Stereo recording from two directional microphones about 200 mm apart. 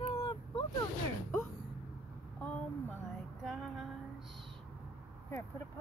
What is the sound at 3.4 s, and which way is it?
Music, centre (ahead or behind).